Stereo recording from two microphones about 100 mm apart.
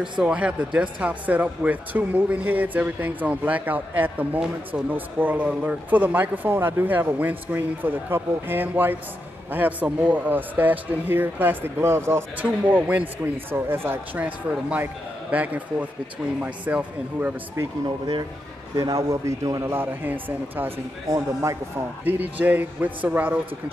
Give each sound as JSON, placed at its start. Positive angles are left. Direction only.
{"t": 0.2, "sound": "speech", "side_deg": -10}
{"t": 17.8, "sound": "speech", "side_deg": -55}
{"t": 18.8, "sound": "a man's voice", "side_deg": -35}
{"t": 21.1, "sound": "a man's voice", "side_deg": -30}
{"t": 22.0, "sound": "speech", "side_deg": -20}